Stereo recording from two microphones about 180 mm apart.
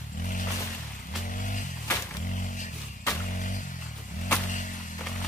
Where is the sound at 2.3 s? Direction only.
45° left (ahead or behind).